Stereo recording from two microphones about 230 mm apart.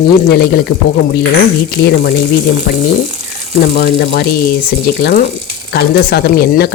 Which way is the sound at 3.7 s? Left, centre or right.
Left.